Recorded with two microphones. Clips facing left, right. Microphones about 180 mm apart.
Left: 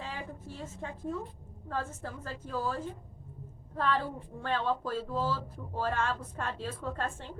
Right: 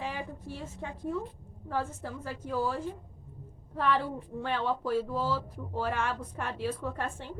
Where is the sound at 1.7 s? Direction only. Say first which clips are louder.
Right 3 dB; 15° right (ahead or behind).